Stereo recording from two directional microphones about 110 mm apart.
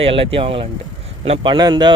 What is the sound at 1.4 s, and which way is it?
Speech, 45° right (ahead or behind).